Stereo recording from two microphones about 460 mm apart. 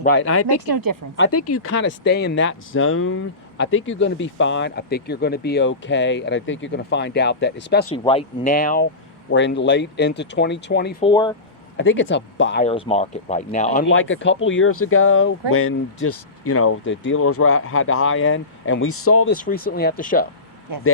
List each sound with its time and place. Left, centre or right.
0.0 s speech: left
0.4 s speech: right
1.1 s speech: left
11.1 s speech: centre
11.8 s speech: left
12.6 s speech: centre; by 19.3 s left
19.4 s speech: centre